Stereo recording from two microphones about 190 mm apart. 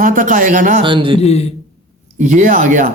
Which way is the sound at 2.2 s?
40° right (ahead or behind).